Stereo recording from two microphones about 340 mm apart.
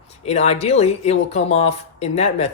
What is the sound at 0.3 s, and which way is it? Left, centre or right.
Speech, centre.